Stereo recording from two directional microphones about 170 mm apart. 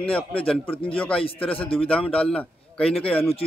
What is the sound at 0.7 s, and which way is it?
Speech, 30° left (ahead or behind).